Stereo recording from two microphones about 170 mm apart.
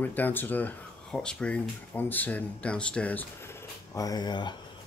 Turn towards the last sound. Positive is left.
turn(degrees=25)  # may be behind; listen again after turning